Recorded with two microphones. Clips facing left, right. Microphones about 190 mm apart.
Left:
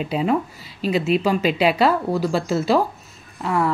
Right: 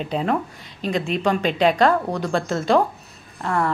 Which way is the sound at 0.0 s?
5° left (ahead or behind).